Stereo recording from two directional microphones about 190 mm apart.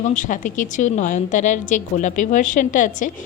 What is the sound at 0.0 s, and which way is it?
A woman's voice, 40° left (ahead or behind).